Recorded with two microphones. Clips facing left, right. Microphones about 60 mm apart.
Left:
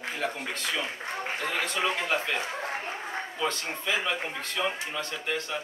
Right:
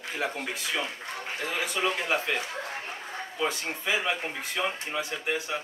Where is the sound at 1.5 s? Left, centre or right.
Centre.